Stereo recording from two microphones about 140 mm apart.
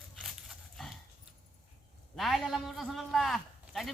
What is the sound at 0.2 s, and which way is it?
Dog, centre (ahead or behind).